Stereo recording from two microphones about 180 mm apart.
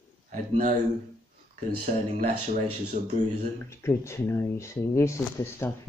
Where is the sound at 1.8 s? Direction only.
45° right (ahead or behind).